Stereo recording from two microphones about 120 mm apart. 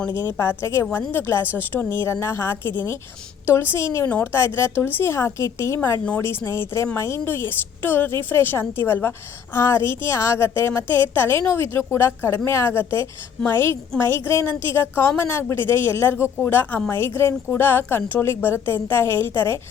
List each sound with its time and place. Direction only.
0.1 s a woman's voice: 20° left (ahead or behind)